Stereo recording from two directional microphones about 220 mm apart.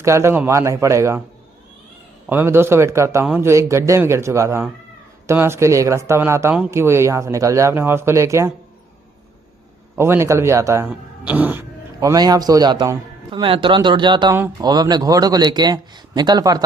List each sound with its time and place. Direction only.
0.0 s speech: 10° right (ahead or behind)
2.2 s speech: 10° right (ahead or behind)
9.9 s speech: 10° right (ahead or behind)